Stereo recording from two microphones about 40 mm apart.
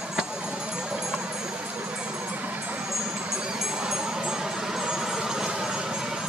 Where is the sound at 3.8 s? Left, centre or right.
Centre.